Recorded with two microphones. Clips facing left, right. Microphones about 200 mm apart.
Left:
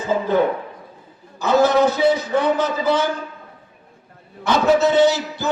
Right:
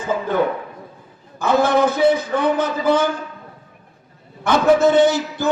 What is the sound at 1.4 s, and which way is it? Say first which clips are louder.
A man's voice: left 1 dB; 50° right (ahead or behind).